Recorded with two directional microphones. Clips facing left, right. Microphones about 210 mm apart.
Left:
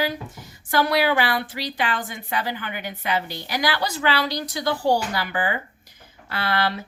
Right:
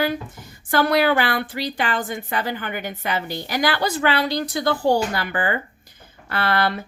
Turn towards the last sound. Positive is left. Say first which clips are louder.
# right 3 dB
turn(degrees=-50)  # may be behind; listen again after turning